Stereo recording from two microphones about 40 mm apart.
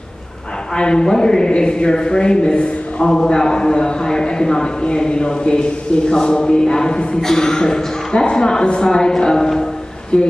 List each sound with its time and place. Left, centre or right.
0.7 s a man's voice: centre